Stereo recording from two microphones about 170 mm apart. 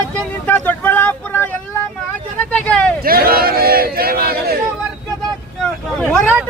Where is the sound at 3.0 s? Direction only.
60° right (ahead or behind).